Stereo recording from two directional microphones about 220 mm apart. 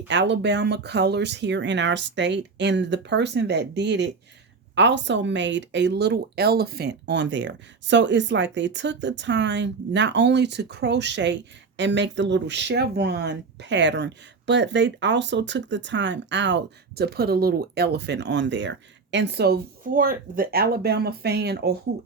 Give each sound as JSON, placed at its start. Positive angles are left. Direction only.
{"t": 0.1, "sound": "speech", "side_deg": -55}